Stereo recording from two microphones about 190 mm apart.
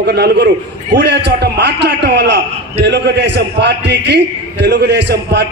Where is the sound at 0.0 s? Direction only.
60° right (ahead or behind).